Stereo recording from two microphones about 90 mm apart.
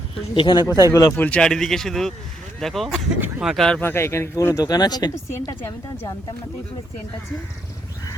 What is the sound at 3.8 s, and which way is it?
Speech, 30° left (ahead or behind).